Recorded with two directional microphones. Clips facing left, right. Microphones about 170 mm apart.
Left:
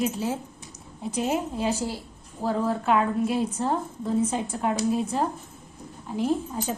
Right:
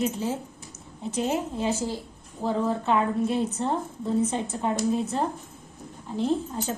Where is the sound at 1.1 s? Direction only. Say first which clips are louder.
Even; 15° left (ahead or behind).